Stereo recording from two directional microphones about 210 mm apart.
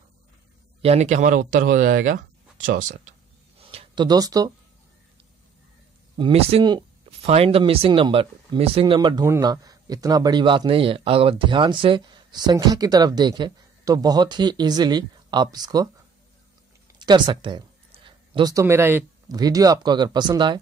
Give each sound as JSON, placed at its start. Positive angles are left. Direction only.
{"t": 0.8, "sound": "speech", "side_deg": -30}
{"t": 3.5, "sound": "a sound", "side_deg": -25}
{"t": 6.1, "sound": "speech", "side_deg": -25}
{"t": 17.0, "sound": "speech", "side_deg": -20}